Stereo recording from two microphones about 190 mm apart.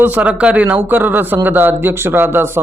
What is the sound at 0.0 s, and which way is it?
A man's voice, 10° right (ahead or behind).